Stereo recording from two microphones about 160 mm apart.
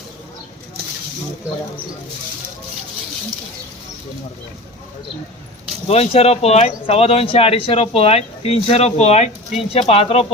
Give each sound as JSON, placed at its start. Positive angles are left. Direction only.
{"t": 5.9, "sound": "speech", "side_deg": 40}